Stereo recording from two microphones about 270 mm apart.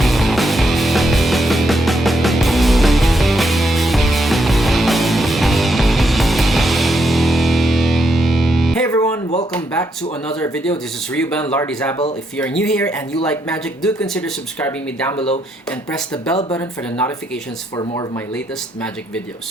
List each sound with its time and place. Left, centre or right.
0.0 s music: centre
9.5 s a sound: centre
10.2 s speech: centre
15.1 s speech: left
15.9 s speech: centre
16.4 s speech: centre